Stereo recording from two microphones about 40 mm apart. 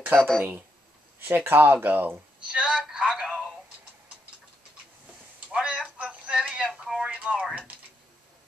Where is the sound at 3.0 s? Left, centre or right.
Right.